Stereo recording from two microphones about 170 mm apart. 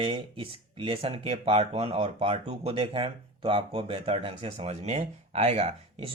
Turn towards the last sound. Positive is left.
turn(degrees=-35)  # may be behind; listen again after turning